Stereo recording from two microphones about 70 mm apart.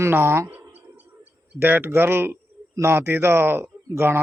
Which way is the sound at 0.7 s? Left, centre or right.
Right.